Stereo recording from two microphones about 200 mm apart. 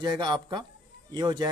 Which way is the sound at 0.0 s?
20° right (ahead or behind).